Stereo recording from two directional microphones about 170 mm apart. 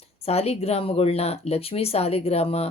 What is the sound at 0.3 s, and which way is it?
Speech, 35° left (ahead or behind).